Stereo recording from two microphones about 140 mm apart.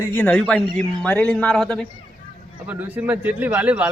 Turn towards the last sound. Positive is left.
turn(degrees=-10)  # may be behind; listen again after turning